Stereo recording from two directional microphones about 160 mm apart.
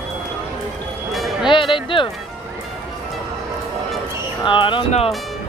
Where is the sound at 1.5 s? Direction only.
30° left (ahead or behind).